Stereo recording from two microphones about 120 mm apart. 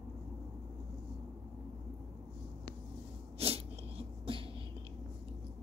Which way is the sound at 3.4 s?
55° right (ahead or behind).